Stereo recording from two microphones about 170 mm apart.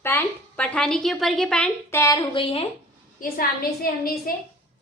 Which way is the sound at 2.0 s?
20° left (ahead or behind).